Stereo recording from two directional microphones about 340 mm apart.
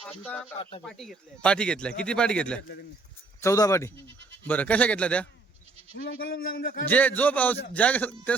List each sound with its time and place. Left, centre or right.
0.1 s a man's voice: centre
4.0 s speech: right
4.4 s a man's voice: centre
6.1 s a man's voice: left
6.8 s a man's voice: centre